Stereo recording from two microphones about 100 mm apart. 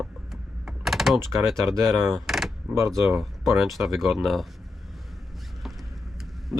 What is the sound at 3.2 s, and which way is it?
Speech, centre (ahead or behind).